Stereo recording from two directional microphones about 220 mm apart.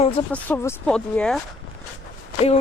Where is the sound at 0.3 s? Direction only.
5° left (ahead or behind).